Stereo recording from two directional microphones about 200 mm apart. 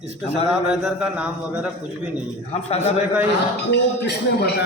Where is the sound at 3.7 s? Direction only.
55° left (ahead or behind).